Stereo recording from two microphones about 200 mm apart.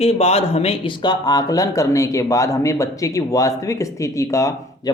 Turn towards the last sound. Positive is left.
turn(degrees=15)  # may be behind; listen again after turning